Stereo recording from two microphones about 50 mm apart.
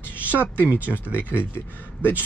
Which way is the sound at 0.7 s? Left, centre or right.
Right.